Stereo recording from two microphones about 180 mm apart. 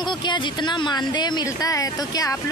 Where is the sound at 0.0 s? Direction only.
25° left (ahead or behind).